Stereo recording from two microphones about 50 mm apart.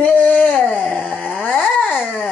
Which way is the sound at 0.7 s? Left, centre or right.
Left.